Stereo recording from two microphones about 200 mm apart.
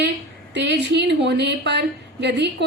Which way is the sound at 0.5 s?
60° right (ahead or behind).